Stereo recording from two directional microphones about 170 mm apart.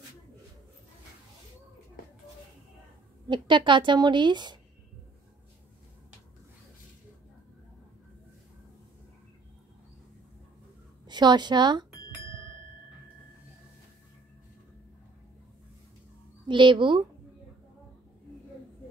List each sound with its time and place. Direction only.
3.3 s a woman's voice: 30° right (ahead or behind)
11.1 s a woman's voice: 25° right (ahead or behind)
16.4 s a woman's voice: 30° right (ahead or behind)